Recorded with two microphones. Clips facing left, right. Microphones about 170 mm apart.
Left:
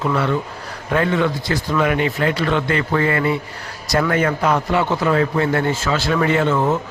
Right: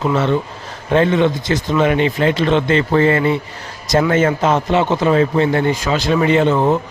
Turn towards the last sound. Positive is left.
turn(degrees=-20)  # may be behind; listen again after turning